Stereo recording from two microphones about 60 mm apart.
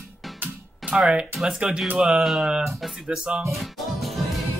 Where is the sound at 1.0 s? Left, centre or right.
Centre.